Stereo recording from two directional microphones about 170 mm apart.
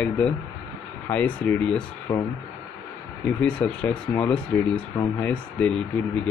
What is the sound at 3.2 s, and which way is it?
Speech, 5° left (ahead or behind).